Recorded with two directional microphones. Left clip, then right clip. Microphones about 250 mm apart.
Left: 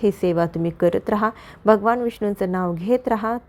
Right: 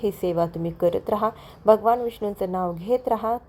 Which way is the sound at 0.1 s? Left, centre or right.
Left.